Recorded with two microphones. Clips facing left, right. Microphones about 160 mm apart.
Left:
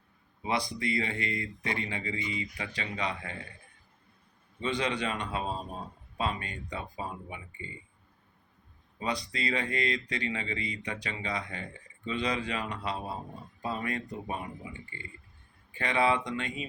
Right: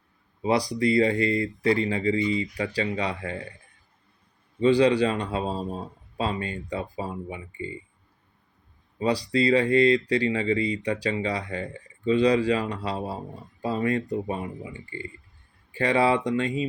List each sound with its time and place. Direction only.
0.4 s speech: 35° right (ahead or behind)
4.6 s speech: 35° right (ahead or behind)
9.0 s speech: 35° right (ahead or behind)